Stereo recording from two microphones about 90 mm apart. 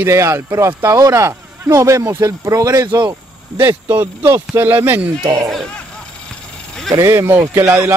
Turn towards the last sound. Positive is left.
turn(degrees=-25)  # may be behind; listen again after turning